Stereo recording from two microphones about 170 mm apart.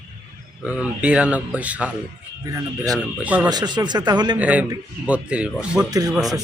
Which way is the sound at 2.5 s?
20° right (ahead or behind).